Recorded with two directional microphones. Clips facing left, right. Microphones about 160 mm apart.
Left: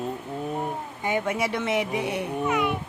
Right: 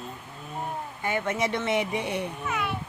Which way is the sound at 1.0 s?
15° left (ahead or behind).